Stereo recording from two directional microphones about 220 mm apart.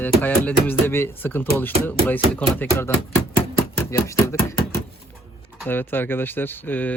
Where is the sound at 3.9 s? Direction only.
15° left (ahead or behind).